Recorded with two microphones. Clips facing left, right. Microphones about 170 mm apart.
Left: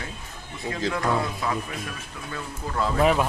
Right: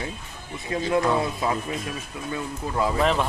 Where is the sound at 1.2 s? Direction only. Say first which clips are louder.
Right 3 dB; 25° right (ahead or behind).